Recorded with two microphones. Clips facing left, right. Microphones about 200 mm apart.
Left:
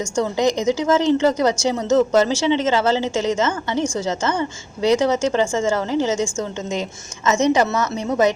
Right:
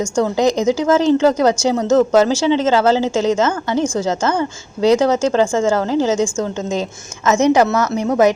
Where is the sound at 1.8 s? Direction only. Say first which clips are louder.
Right 3 dB; 35° right (ahead or behind).